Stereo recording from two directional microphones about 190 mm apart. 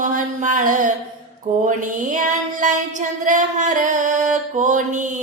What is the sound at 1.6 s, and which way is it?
Female singing, 40° right (ahead or behind).